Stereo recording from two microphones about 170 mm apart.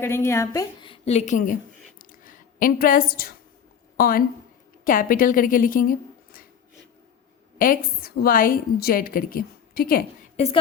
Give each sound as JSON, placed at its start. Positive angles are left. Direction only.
{"t": 0.0, "sound": "a woman's voice", "side_deg": 15}
{"t": 2.0, "sound": "a sound", "side_deg": 55}
{"t": 3.9, "sound": "a woman's voice", "side_deg": 60}
{"t": 7.6, "sound": "a woman's voice", "side_deg": 55}
{"t": 10.3, "sound": "a woman's voice", "side_deg": 40}